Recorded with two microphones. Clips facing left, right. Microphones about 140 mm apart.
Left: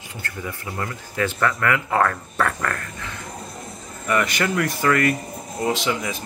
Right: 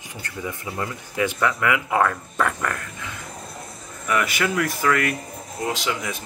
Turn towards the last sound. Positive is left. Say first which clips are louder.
# left 3 dB
turn(degrees=0)  # may be behind; listen again after turning